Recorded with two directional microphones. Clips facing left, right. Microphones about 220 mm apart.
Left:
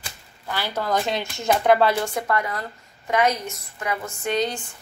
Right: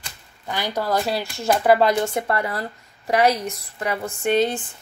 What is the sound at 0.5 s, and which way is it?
Speech, 15° right (ahead or behind).